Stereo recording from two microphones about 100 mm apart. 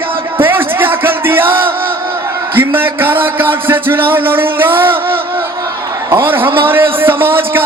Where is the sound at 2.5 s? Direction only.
20° right (ahead or behind).